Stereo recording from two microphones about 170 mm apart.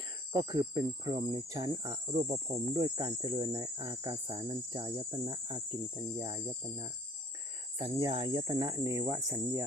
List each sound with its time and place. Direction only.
0.3 s speech: 25° right (ahead or behind)
4.4 s cricket: 35° right (ahead or behind)
7.8 s speech: 20° right (ahead or behind)